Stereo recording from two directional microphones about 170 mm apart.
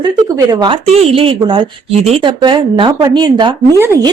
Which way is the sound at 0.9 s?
35° right (ahead or behind).